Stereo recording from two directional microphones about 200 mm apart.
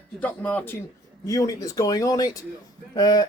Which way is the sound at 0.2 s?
5° left (ahead or behind).